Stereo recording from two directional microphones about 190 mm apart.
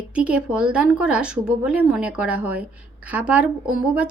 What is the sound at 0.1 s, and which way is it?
Speech, 5° right (ahead or behind).